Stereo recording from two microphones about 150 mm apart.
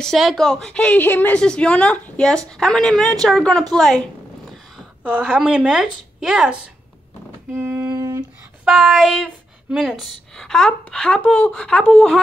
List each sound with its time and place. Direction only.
0.0 s a woman's voice: centre (ahead or behind)
7.5 s a sound: 15° right (ahead or behind)
8.6 s a woman's voice: 5° right (ahead or behind)